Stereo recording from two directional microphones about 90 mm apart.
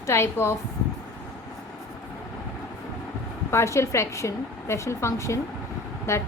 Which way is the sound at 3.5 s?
30° left (ahead or behind).